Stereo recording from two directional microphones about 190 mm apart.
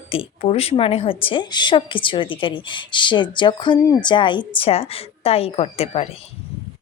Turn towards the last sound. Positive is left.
turn(degrees=30)  # may be behind; listen again after turning